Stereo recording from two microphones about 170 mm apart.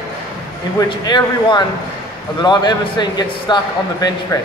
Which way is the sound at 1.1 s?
25° left (ahead or behind).